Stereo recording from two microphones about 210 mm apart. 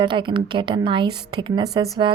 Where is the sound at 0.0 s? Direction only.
25° right (ahead or behind).